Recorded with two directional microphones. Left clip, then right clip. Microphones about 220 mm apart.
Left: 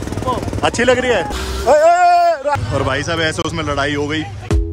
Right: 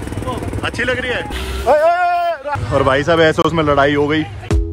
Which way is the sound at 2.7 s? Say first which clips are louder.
Right 5 dB; centre (ahead or behind).